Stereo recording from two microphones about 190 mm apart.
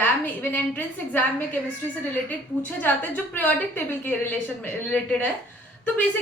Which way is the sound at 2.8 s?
10° left (ahead or behind).